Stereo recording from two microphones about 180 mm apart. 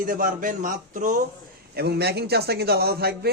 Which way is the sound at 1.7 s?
65° right (ahead or behind).